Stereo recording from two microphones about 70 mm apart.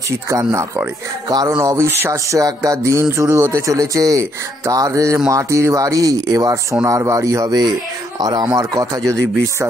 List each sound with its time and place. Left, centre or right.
0.3 s speech: right
1.3 s speech: right
1.7 s speech: right
3.7 s speech: right